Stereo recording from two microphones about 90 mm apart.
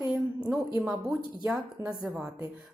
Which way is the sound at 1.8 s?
35° right (ahead or behind).